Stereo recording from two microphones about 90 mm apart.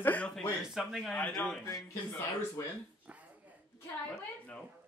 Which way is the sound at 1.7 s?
40° left (ahead or behind).